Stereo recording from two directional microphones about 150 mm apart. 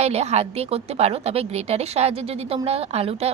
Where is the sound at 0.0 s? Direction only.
45° right (ahead or behind).